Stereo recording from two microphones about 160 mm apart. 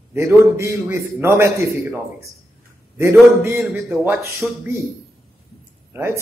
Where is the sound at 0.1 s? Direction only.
15° right (ahead or behind).